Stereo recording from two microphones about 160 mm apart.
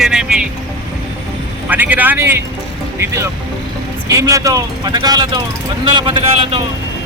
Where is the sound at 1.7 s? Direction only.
10° right (ahead or behind).